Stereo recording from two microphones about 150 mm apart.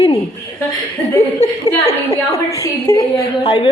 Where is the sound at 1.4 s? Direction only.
45° left (ahead or behind).